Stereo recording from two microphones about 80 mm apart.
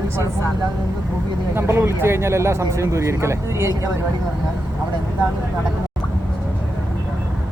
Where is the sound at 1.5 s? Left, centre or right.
Right.